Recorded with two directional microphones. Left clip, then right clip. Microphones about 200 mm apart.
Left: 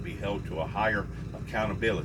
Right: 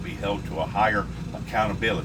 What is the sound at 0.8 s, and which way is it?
Speech, 25° right (ahead or behind).